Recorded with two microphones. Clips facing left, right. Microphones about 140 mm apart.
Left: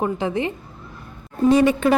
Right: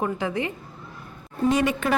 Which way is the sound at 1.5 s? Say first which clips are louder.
Left 7 dB; 30° left (ahead or behind).